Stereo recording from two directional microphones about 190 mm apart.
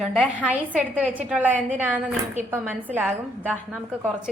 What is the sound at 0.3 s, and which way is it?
A woman's voice, 5° right (ahead or behind).